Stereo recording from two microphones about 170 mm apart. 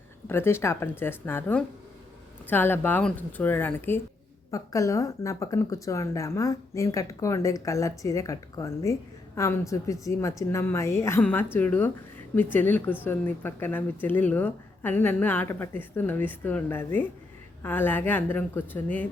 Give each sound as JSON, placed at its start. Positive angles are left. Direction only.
{"t": 0.3, "sound": "speech", "side_deg": 15}